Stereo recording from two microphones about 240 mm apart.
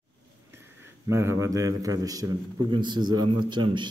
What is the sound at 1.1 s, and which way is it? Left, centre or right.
A man's voice, centre.